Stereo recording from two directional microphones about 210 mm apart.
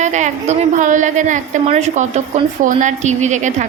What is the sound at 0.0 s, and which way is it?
A woman's voice, 35° right (ahead or behind).